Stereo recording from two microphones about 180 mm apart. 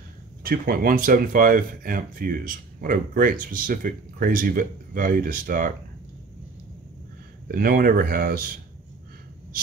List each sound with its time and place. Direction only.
0.4 s speech: 55° right (ahead or behind)
7.4 s speech: 55° right (ahead or behind)